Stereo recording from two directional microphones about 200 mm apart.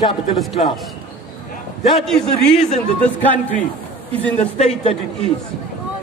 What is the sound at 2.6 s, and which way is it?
Speech, 35° left (ahead or behind).